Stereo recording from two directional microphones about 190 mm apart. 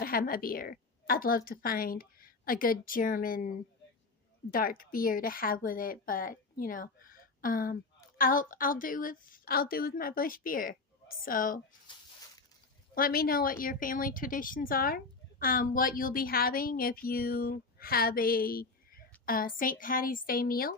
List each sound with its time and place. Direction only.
0.0 s a woman's voice: 50° left (ahead or behind)
4.5 s speech: 50° left (ahead or behind)
12.9 s speech: 50° left (ahead or behind)